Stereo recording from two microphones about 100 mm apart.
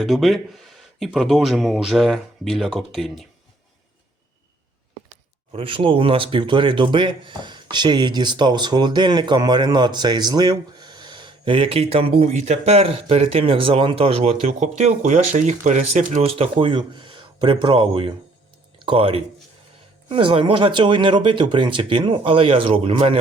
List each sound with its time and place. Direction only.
0.0 s speech: centre (ahead or behind)
5.5 s speech: 65° right (ahead or behind)